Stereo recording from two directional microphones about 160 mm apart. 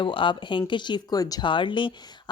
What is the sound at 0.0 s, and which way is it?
Speech, 30° left (ahead or behind).